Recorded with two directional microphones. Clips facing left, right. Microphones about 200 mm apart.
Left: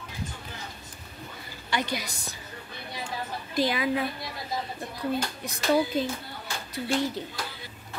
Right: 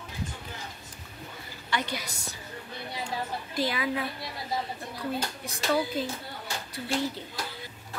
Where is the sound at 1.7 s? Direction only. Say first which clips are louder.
Left 2 dB; 15° left (ahead or behind).